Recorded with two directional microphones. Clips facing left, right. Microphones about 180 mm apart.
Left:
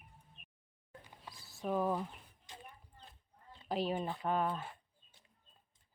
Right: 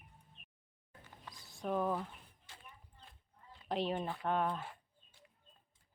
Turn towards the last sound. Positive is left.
turn(degrees=0)  # may be behind; listen again after turning